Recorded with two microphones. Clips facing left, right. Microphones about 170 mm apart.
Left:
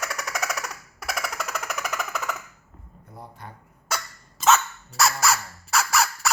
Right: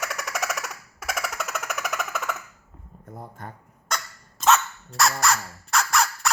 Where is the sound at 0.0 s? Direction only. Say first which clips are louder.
Even; centre (ahead or behind).